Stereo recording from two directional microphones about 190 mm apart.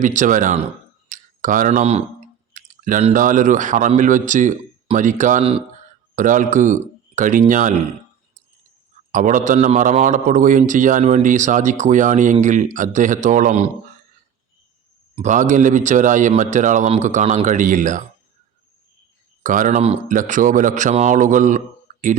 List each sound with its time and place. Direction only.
0.0 s a man's voice: 40° right (ahead or behind)
6.1 s a man's voice: 45° right (ahead or behind)
9.1 s a man's voice: 40° right (ahead or behind)
15.1 s a man's voice: 40° right (ahead or behind)
19.4 s a man's voice: 40° right (ahead or behind)